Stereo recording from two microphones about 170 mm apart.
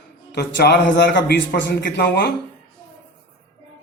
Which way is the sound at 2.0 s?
65° left (ahead or behind).